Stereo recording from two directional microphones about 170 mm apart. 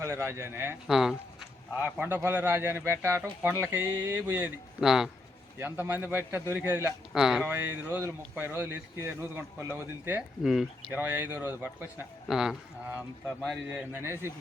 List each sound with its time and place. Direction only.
0.0 s speech: 15° right (ahead or behind)
0.9 s speech: centre (ahead or behind)
2.0 s speech: 10° right (ahead or behind)
4.8 s speech: 5° right (ahead or behind)
5.5 s speech: 15° right (ahead or behind)
7.1 s speech: 5° right (ahead or behind)
10.4 s speech: centre (ahead or behind)
11.0 s speech: 15° right (ahead or behind)
13.7 s speech: 10° right (ahead or behind)